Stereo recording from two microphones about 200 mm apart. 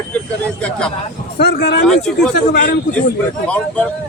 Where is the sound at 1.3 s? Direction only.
55° left (ahead or behind).